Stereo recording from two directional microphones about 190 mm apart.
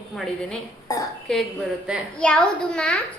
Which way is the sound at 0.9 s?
20° left (ahead or behind).